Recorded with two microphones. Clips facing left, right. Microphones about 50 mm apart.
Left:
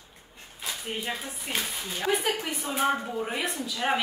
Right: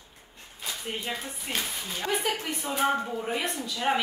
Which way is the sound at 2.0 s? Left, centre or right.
Centre.